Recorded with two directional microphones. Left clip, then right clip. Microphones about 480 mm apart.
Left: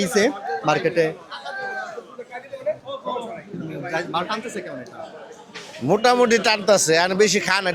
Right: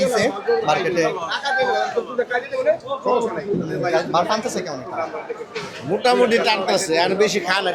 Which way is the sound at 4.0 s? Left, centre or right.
Centre.